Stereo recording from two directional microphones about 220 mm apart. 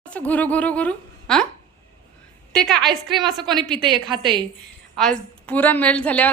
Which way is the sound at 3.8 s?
20° right (ahead or behind).